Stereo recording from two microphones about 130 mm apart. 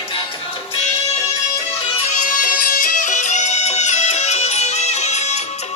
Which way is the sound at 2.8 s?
90° left.